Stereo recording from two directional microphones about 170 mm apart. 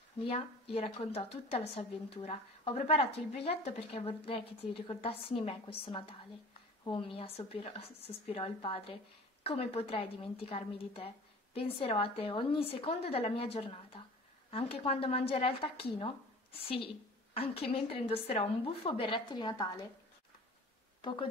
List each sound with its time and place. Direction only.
0.2 s a woman's voice: 35° left (ahead or behind)